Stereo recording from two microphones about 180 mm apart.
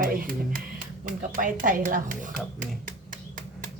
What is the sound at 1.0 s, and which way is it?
Speech, 50° right (ahead or behind).